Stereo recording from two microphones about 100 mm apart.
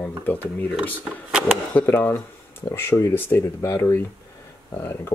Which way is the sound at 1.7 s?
20° left (ahead or behind).